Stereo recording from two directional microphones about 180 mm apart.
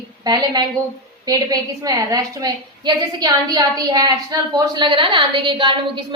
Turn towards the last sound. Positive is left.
turn(degrees=-25)  # may be behind; listen again after turning